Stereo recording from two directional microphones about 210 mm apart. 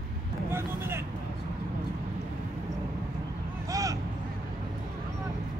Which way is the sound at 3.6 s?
15° right (ahead or behind).